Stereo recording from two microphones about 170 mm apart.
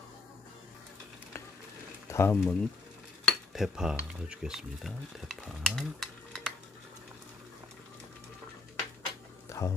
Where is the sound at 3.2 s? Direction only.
Centre (ahead or behind).